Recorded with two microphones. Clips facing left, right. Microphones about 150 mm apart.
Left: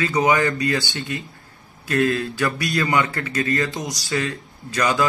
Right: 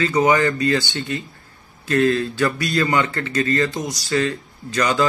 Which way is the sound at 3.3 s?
20° left (ahead or behind).